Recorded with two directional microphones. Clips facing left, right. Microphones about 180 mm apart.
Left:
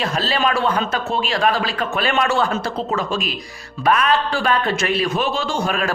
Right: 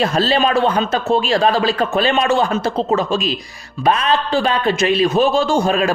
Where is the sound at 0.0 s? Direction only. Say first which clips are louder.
Right 5 dB; 30° right (ahead or behind).